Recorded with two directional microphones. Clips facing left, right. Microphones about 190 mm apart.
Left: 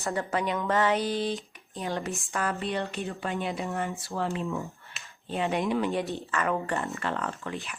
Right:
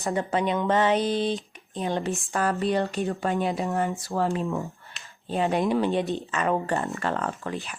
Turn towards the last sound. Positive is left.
turn(degrees=-40)  # may be behind; listen again after turning